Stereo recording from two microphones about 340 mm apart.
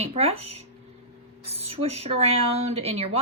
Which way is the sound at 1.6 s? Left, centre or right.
Centre.